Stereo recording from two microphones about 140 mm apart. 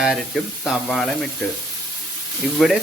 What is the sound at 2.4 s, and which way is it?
Speech, centre (ahead or behind).